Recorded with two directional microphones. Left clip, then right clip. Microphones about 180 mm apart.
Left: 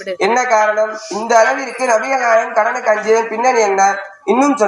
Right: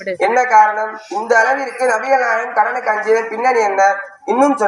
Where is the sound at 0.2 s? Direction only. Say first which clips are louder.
Right 2 dB; 35° left (ahead or behind).